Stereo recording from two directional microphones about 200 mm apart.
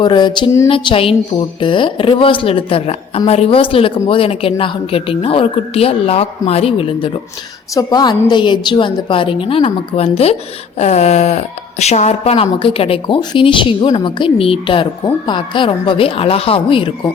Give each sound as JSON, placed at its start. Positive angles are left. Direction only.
{"t": 0.0, "sound": "speech", "side_deg": 20}
{"t": 10.8, "sound": "a sound", "side_deg": 35}
{"t": 11.8, "sound": "speech", "side_deg": 35}